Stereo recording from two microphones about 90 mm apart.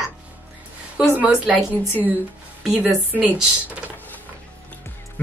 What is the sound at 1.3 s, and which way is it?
Speech, 10° right (ahead or behind).